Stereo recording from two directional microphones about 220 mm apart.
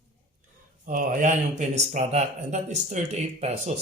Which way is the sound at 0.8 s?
40° right (ahead or behind).